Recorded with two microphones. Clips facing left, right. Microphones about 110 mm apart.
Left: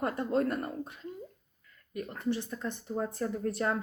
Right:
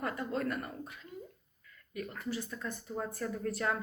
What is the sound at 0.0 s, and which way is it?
Speech, 30° left (ahead or behind).